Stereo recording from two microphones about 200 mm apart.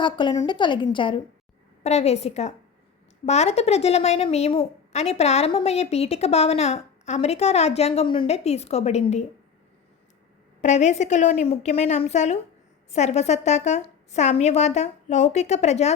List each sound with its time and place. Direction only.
0.0 s a woman's voice: 25° left (ahead or behind)
10.6 s a woman's voice: 35° left (ahead or behind)